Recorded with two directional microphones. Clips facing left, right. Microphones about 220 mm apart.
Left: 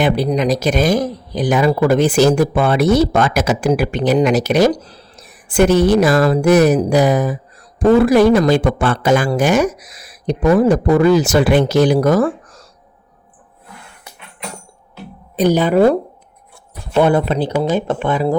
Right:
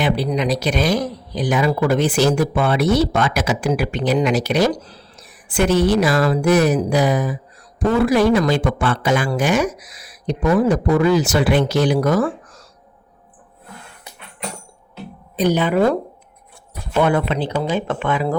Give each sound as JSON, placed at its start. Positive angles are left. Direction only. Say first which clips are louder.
{"t": 0.0, "sound": "a woman's voice", "louder": "left 4 dB", "side_deg": 45}
{"t": 15.4, "sound": "speech", "louder": "left 4 dB", "side_deg": 40}
{"t": 17.0, "sound": "speech", "louder": "left 4 dB", "side_deg": 35}